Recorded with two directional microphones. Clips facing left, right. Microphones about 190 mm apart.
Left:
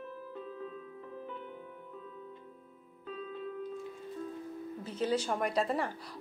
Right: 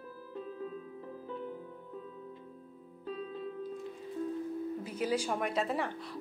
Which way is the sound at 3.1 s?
35° right (ahead or behind).